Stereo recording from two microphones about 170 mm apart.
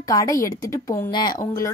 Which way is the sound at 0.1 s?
20° left (ahead or behind).